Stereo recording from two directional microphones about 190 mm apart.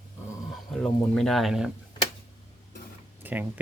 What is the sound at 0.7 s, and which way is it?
Speech, centre (ahead or behind).